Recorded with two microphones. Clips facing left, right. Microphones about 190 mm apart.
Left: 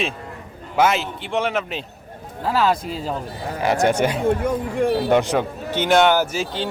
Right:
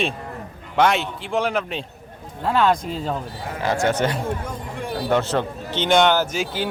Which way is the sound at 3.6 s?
20° left (ahead or behind).